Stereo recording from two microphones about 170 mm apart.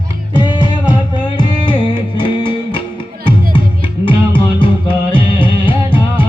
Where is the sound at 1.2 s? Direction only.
25° left (ahead or behind).